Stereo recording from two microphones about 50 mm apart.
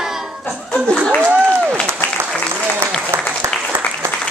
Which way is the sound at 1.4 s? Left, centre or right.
Right.